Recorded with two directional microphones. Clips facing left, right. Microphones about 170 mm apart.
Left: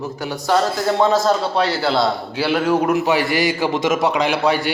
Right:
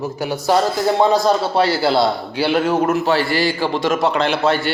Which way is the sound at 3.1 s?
15° left (ahead or behind).